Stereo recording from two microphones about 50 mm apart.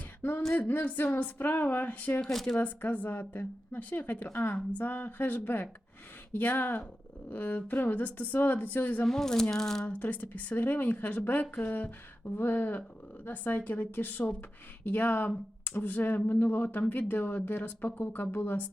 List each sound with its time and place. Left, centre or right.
0.2 s a sound: left
0.7 s a woman's voice: left
2.2 s speech: centre
2.6 s a woman's voice: left
9.0 s speech: centre
9.8 s a woman's voice: left